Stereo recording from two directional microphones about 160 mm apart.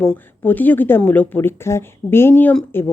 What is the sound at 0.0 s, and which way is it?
Speech, 10° left (ahead or behind).